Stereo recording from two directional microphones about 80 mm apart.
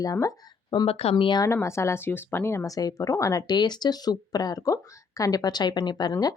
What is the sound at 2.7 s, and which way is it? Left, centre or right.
Speech, left.